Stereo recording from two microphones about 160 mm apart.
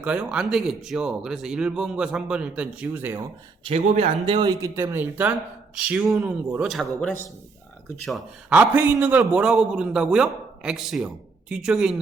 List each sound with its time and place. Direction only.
0.0 s a man's voice: 5° right (ahead or behind)
3.6 s a man's voice: 40° right (ahead or behind)
4.6 s a man's voice: 15° right (ahead or behind)